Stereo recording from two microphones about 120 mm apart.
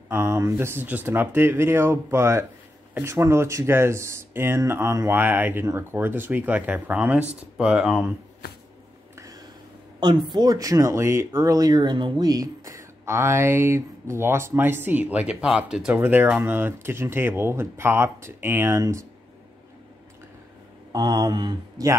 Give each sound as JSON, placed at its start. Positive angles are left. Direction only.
{"t": 0.1, "sound": "speech", "side_deg": -20}
{"t": 9.1, "sound": "a sound", "side_deg": -25}
{"t": 9.9, "sound": "speech", "side_deg": -35}
{"t": 20.9, "sound": "speech", "side_deg": -35}